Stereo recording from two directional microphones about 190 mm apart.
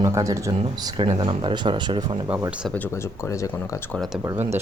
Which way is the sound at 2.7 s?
10° left (ahead or behind).